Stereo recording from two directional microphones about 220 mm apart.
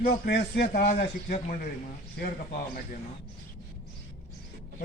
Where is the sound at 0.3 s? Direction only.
50° left (ahead or behind).